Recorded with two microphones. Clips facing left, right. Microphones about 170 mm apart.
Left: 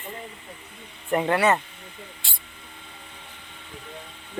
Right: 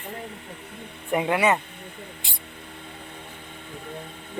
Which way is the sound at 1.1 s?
10° right (ahead or behind).